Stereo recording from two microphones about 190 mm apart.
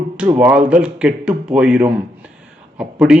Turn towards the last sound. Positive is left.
turn(degrees=-5)  # may be behind; listen again after turning